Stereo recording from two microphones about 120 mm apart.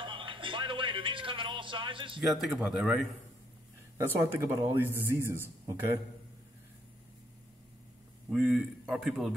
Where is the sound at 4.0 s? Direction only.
25° right (ahead or behind).